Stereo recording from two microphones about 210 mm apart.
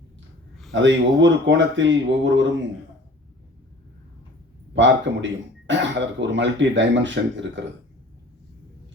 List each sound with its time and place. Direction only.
0.7 s speech: 60° right (ahead or behind)
4.7 s speech: 60° right (ahead or behind)